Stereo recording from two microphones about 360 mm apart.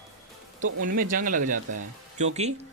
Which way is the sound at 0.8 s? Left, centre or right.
Right.